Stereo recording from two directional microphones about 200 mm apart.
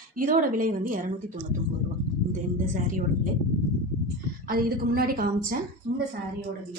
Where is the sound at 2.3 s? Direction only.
40° right (ahead or behind).